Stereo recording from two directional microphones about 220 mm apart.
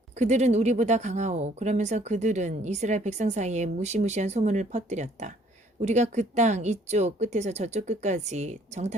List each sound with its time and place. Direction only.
0.2 s speech: 30° right (ahead or behind)